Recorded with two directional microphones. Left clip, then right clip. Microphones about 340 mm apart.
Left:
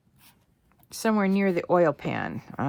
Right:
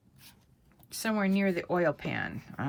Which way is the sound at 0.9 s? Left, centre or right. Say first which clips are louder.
Left 6 dB; centre.